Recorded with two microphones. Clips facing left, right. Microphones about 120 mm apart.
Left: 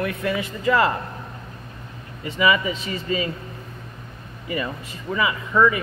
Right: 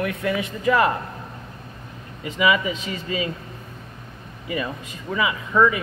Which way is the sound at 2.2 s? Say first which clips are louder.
Even; 15° right (ahead or behind).